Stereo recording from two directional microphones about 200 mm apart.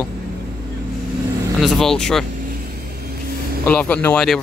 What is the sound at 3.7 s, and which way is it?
Speech, 5° left (ahead or behind).